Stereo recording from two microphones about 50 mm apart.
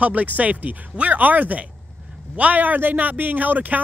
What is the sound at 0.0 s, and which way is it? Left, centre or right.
Speech, right.